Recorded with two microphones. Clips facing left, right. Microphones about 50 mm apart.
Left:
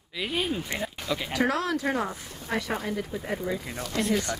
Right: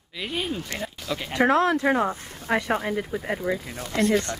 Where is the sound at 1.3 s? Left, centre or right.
Right.